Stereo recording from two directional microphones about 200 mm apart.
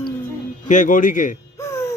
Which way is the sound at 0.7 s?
40° left (ahead or behind).